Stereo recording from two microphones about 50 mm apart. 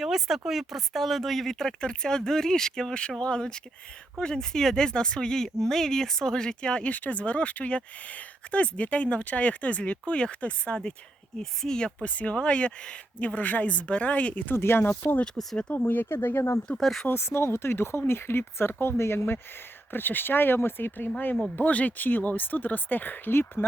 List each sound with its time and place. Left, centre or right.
0.0 s speech: centre
12.0 s speech: left
14.5 s speech: left
15.7 s speech: left
16.0 s speech: left
16.6 s speech: centre
17.2 s speech: left
21.5 s speech: left